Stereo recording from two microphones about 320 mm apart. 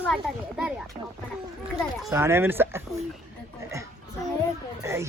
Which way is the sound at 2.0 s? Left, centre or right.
Centre.